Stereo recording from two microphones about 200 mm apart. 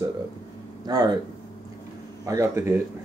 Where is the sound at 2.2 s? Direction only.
15° right (ahead or behind).